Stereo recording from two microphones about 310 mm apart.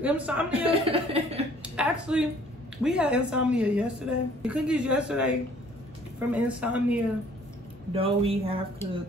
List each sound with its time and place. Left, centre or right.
0.0 s a woman's voice: centre
0.5 s speech: centre
1.6 s a woman's voice: centre
6.3 s a woman's voice: centre
7.9 s speech: centre
8.8 s speech: centre